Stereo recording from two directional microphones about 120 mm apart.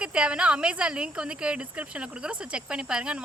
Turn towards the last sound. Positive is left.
turn(degrees=-5)  # may be behind; listen again after turning